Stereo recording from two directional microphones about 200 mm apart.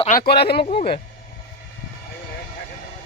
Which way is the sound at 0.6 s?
25° left (ahead or behind).